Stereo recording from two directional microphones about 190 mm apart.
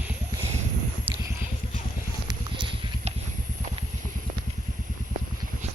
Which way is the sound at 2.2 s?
25° right (ahead or behind).